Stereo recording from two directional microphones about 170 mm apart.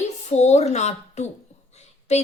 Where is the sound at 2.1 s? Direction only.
40° left (ahead or behind).